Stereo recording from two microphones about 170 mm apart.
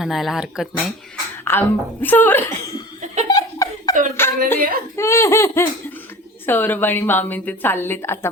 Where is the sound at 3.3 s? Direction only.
20° left (ahead or behind).